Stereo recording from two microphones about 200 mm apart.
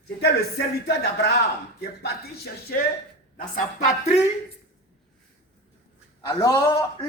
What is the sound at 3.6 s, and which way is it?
Speech, 35° left (ahead or behind).